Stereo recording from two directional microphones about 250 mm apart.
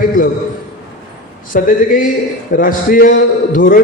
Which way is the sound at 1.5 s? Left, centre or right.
Left.